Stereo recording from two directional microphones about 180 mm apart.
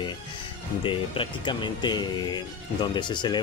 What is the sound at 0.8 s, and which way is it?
Speech, 30° left (ahead or behind).